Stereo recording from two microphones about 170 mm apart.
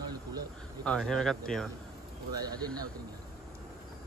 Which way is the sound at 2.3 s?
25° right (ahead or behind).